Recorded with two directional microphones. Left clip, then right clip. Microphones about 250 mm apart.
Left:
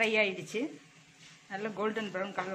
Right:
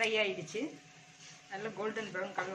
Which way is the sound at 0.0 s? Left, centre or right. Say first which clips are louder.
Left 3 dB; left.